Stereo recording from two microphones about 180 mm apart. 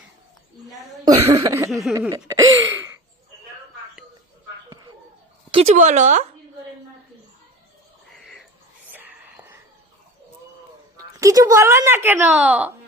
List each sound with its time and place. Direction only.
1.0 s cough: 20° right (ahead or behind)
1.5 s speech: 15° right (ahead or behind)
1.9 s throat clearing: 15° right (ahead or behind)
5.5 s speech: 35° right (ahead or behind)
8.9 s whispering: 10° right (ahead or behind)
10.9 s speech: 20° right (ahead or behind)